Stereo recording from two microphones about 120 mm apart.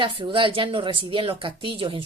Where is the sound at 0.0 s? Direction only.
45° right (ahead or behind).